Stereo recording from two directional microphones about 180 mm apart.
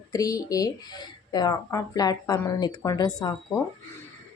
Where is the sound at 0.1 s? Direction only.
20° left (ahead or behind).